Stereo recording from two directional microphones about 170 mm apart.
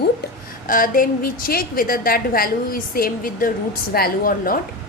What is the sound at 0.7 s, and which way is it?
A woman's voice, 55° left (ahead or behind).